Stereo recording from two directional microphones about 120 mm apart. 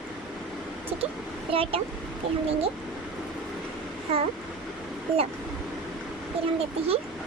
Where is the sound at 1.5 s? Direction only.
50° right (ahead or behind).